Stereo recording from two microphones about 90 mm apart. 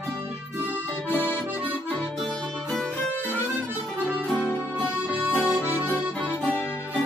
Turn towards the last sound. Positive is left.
turn(degrees=-15)  # may be behind; listen again after turning